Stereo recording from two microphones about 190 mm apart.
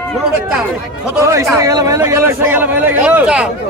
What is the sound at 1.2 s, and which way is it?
A man's voice, 15° right (ahead or behind).